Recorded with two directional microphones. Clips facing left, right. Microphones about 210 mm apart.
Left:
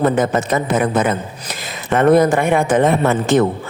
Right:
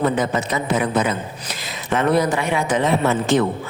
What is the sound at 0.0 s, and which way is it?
Speech, 50° left (ahead or behind).